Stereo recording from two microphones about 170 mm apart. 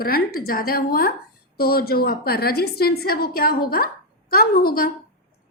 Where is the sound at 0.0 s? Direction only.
60° left (ahead or behind).